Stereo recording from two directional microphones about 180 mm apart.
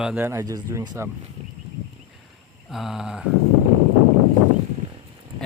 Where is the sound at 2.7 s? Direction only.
Centre (ahead or behind).